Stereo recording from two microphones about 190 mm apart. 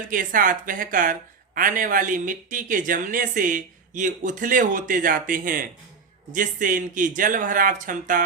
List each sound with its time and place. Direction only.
0.1 s speech: 45° right (ahead or behind)